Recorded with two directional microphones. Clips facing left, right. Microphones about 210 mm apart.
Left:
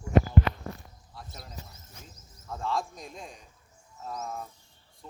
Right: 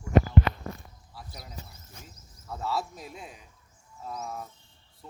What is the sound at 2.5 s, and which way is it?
Speech, 5° right (ahead or behind).